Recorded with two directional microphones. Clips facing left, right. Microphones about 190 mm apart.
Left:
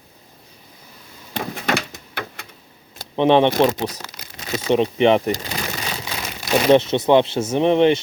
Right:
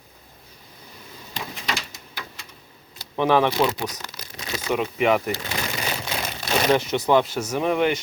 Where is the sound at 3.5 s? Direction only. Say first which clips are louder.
Left 5 dB; 45° left (ahead or behind).